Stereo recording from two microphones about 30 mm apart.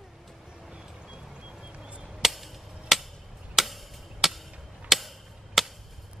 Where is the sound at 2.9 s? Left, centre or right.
Centre.